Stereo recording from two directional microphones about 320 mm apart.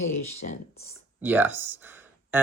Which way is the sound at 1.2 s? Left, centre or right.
Centre.